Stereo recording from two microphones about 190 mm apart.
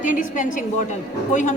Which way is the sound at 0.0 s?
45° left (ahead or behind).